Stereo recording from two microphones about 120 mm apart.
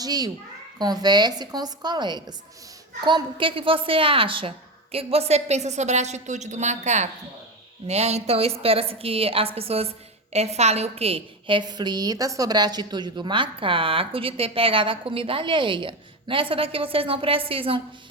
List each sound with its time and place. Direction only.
0.0 s a child's voice: 35° right (ahead or behind); by 7.1 s 75° right (ahead or behind)
7.9 s a woman's voice: 65° right (ahead or behind); by 17.7 s 50° right (ahead or behind)